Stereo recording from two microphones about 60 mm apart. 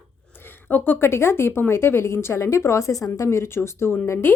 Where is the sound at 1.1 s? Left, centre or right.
Left.